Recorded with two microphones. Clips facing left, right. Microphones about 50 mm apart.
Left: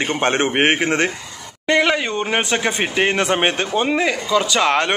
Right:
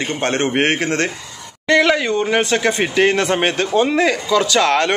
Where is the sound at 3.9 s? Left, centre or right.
Centre.